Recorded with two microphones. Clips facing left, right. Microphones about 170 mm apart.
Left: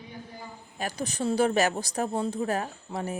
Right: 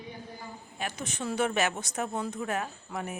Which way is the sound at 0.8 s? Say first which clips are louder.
Left 5 dB; 35° left (ahead or behind).